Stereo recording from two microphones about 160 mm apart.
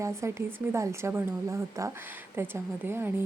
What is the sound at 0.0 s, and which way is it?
Speech, 15° right (ahead or behind).